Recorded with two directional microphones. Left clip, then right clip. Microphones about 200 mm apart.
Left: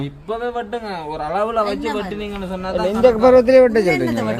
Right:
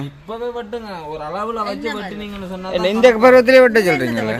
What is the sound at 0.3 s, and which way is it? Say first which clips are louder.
A man's voice: left 2 dB; 10° right (ahead or behind).